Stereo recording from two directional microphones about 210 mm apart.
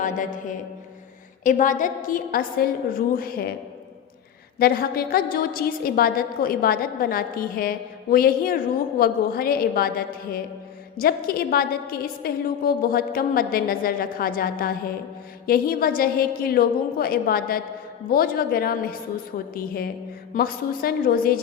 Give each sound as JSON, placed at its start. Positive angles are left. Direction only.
{"t": 0.0, "sound": "a woman's voice", "side_deg": 40}
{"t": 1.5, "sound": "a woman's voice", "side_deg": 40}
{"t": 4.6, "sound": "a woman's voice", "side_deg": 45}
{"t": 10.9, "sound": "a woman's voice", "side_deg": 45}